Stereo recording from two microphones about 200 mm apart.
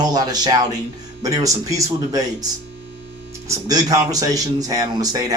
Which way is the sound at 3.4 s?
20° right (ahead or behind).